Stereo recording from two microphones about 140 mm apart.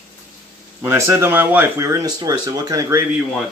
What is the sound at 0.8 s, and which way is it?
Speech, 20° right (ahead or behind).